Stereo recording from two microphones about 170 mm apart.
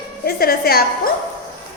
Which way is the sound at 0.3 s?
65° left (ahead or behind).